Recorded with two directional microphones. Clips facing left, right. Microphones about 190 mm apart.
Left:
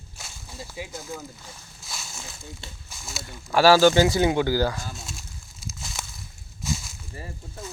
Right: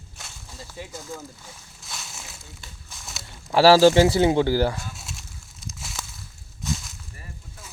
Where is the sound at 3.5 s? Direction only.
30° right (ahead or behind).